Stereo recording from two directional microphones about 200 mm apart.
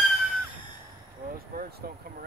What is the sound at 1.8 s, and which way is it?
Speech, 45° right (ahead or behind).